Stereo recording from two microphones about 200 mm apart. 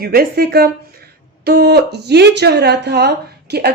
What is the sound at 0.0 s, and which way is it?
Speech, 50° right (ahead or behind).